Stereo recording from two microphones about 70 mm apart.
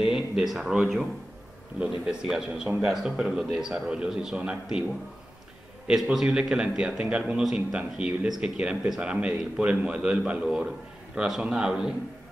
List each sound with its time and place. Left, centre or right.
0.0 s speech: centre
2.0 s a man's voice: centre
6.2 s a man's voice: centre